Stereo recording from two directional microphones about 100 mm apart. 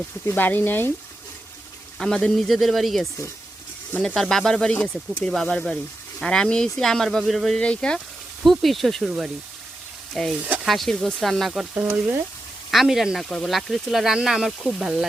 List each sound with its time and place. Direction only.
0.3 s speech: 20° left (ahead or behind)
2.0 s speech: 5° left (ahead or behind)
12.7 s speech: 5° right (ahead or behind)